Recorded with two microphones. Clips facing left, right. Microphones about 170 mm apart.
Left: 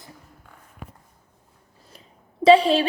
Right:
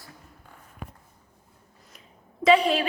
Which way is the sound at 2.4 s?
30° left (ahead or behind).